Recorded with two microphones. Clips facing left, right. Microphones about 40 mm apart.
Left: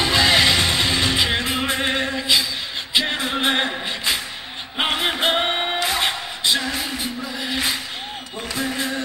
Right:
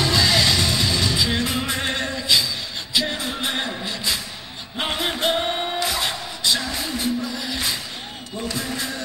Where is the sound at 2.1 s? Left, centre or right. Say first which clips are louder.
Right 2 dB; centre.